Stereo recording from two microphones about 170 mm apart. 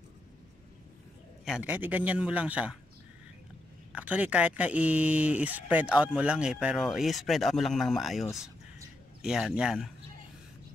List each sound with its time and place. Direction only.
1.4 s speech: 5° right (ahead or behind)
3.9 s speech: 10° right (ahead or behind)